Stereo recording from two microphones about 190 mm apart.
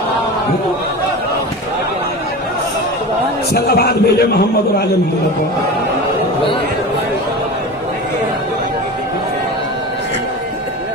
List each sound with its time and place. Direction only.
3.5 s a man's voice: 55° left (ahead or behind)